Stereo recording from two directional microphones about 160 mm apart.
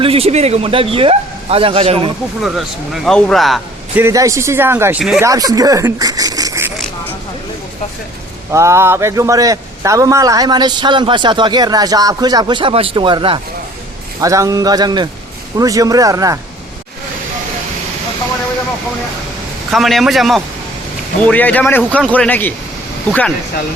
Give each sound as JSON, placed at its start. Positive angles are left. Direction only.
{"t": 0.0, "sound": "speech", "side_deg": -35}
{"t": 2.4, "sound": "speech", "side_deg": 0}
{"t": 3.9, "sound": "speech", "side_deg": -20}
{"t": 5.2, "sound": "speech", "side_deg": -20}
{"t": 8.5, "sound": "a man's voice", "side_deg": -15}
{"t": 14.2, "sound": "a man's voice", "side_deg": -20}
{"t": 19.7, "sound": "speech", "side_deg": 0}